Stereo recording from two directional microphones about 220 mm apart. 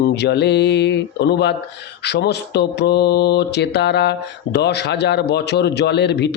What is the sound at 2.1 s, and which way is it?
Speech, 50° left (ahead or behind).